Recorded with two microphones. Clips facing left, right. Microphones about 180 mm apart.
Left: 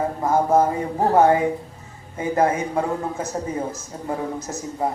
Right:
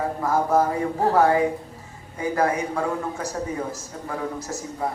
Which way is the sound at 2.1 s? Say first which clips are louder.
Left 2 dB; 20° left (ahead or behind).